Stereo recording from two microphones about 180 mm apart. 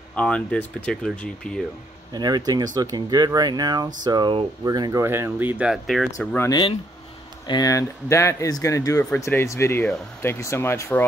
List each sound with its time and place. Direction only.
0.1 s speech: 5° left (ahead or behind)
2.1 s speech: 20° right (ahead or behind); by 6.0 s centre (ahead or behind)
6.1 s speech: 15° left (ahead or behind)